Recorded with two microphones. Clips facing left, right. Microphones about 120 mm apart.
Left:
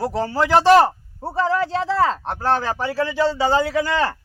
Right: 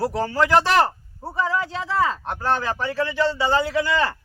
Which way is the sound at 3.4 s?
40° left (ahead or behind).